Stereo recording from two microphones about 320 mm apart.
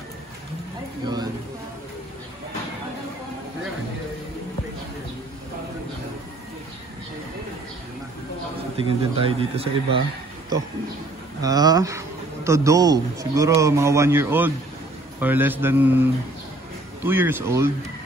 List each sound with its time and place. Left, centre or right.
8.7 s a man's voice: centre
11.4 s a man's voice: centre